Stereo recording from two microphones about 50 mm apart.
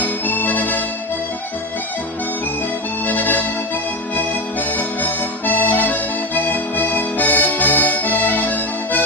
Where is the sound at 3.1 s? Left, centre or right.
Left.